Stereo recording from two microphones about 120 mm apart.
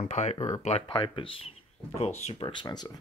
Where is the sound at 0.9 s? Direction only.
45° left (ahead or behind).